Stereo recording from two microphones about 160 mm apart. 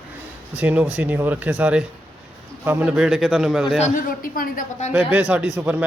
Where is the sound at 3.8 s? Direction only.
50° left (ahead or behind).